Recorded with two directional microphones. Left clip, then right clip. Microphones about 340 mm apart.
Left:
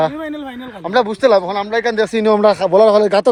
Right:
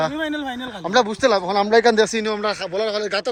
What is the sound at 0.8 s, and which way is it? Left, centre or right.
Speech, centre.